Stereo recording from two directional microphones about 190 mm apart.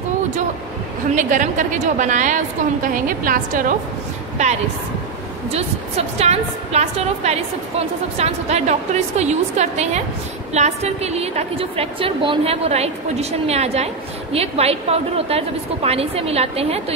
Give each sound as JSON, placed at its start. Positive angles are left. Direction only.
{"t": 1.1, "sound": "a woman's voice", "side_deg": -40}
{"t": 5.5, "sound": "a woman's voice", "side_deg": -35}